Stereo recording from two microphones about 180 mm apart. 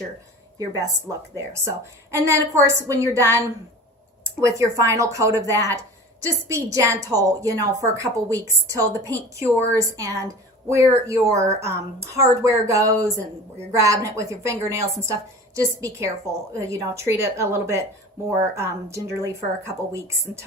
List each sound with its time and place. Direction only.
2.1 s a woman's voice: 15° right (ahead or behind)